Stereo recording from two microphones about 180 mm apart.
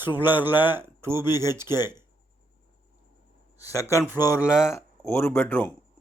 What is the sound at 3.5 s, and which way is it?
Speech, 20° left (ahead or behind).